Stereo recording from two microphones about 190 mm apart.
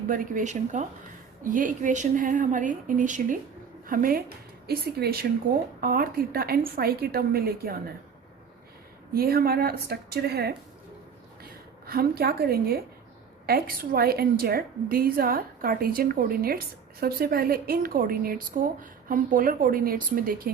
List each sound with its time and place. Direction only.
0.1 s a woman's voice: 45° right (ahead or behind)
9.1 s a woman's voice: 50° right (ahead or behind)
11.9 s a woman's voice: 55° right (ahead or behind)